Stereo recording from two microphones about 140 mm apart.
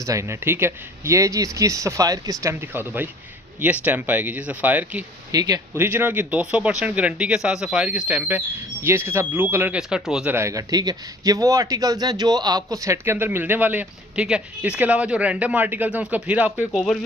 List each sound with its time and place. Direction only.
0.0 s speech: 20° right (ahead or behind)
5.3 s speech: 25° right (ahead or behind)
5.8 s speech: 15° right (ahead or behind)
10.3 s speech: 20° right (ahead or behind)